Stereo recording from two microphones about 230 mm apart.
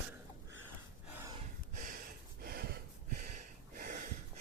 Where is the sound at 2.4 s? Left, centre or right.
Right.